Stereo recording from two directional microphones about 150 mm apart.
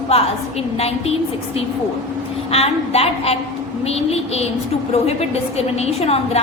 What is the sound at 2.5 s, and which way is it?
A woman's voice, 40° left (ahead or behind).